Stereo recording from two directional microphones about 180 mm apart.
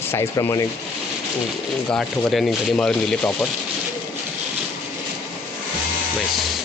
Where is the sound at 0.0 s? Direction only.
15° left (ahead or behind).